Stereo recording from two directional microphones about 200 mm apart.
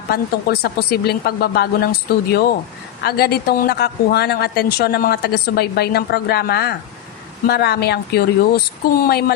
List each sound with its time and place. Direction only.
0.1 s a woman's voice: 50° left (ahead or behind)